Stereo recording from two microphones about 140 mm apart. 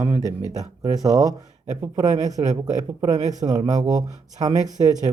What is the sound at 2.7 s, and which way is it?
Speech, 25° right (ahead or behind).